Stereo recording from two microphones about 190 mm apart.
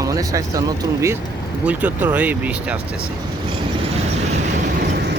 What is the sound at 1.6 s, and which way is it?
Speech, 10° right (ahead or behind).